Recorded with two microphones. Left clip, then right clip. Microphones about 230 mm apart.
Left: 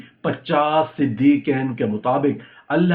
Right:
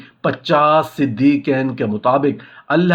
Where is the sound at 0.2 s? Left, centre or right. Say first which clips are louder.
Right 5 dB; right.